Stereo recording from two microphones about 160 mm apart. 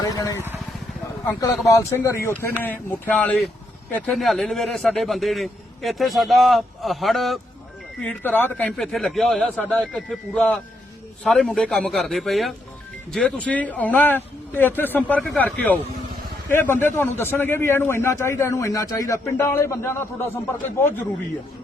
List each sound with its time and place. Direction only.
0.0 s speech: 20° left (ahead or behind)
1.6 s a man's voice: 20° left (ahead or behind); by 7.3 s centre (ahead or behind)
8.0 s a man's voice: 10° left (ahead or behind)